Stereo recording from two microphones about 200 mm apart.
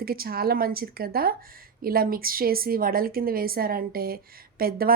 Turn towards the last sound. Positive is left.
turn(degrees=-50)  # may be behind; listen again after turning